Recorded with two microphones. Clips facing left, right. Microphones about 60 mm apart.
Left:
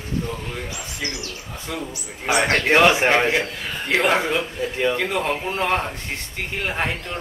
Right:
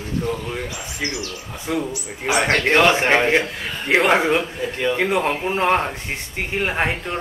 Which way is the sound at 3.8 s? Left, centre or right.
Centre.